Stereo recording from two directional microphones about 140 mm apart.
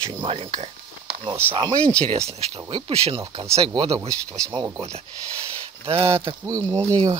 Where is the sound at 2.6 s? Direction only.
35° right (ahead or behind).